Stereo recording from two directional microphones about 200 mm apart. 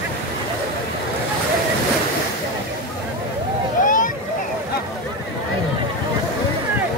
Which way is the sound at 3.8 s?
40° left (ahead or behind).